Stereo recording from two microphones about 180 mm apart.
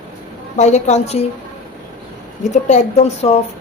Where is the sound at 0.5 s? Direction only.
40° left (ahead or behind).